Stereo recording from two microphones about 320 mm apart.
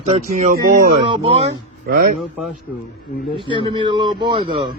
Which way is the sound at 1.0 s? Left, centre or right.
Centre.